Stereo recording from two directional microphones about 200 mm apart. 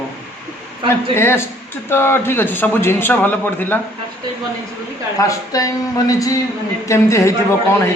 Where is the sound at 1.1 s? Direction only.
10° left (ahead or behind).